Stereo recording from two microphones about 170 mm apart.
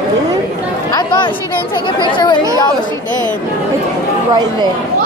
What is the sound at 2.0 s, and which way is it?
Speech, 25° left (ahead or behind).